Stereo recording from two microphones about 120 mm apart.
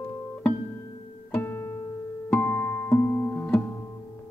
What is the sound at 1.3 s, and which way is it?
Music, 20° left (ahead or behind).